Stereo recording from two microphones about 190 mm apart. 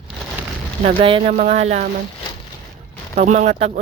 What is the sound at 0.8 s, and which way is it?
Speech, 30° right (ahead or behind).